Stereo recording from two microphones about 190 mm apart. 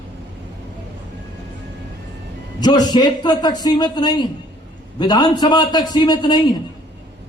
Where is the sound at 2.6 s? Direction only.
20° left (ahead or behind).